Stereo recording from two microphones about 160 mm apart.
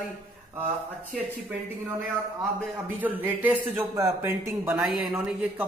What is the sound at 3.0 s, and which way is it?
Speech, 10° right (ahead or behind).